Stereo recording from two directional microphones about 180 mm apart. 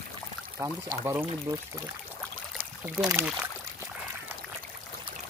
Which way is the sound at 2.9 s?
20° right (ahead or behind).